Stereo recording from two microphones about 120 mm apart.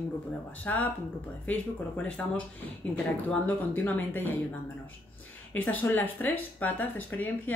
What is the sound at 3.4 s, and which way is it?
Speech, 15° left (ahead or behind).